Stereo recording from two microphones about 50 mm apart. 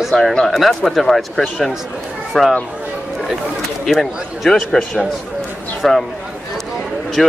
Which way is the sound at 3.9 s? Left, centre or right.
Centre.